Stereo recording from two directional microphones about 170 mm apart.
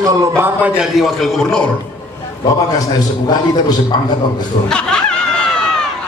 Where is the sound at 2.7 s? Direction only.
25° left (ahead or behind).